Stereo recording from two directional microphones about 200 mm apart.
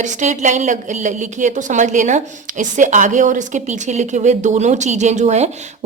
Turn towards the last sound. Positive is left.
turn(degrees=-35)  # may be behind; listen again after turning